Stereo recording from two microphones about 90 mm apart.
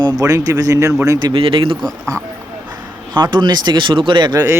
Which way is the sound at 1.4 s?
75° right (ahead or behind).